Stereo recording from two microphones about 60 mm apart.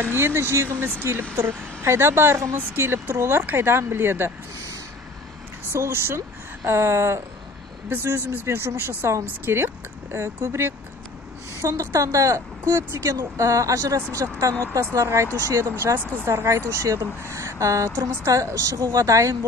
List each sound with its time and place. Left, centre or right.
0.1 s speech: right
5.7 s speech: right
10.1 s speech: right
13.1 s speech: right
15.5 s speech: right
16.3 s speech: right